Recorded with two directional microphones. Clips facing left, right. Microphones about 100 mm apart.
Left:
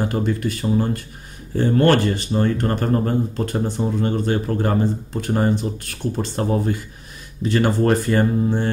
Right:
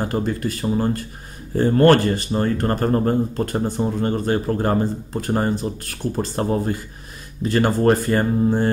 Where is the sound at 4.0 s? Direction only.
40° right (ahead or behind).